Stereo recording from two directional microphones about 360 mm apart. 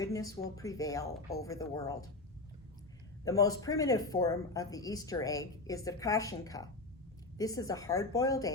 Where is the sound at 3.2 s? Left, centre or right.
Centre.